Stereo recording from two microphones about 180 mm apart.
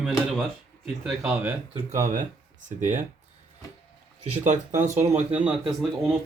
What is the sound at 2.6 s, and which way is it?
Speech, 45° right (ahead or behind).